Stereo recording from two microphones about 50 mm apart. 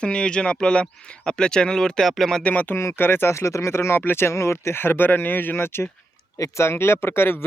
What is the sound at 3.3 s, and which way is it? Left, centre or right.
Speech, left.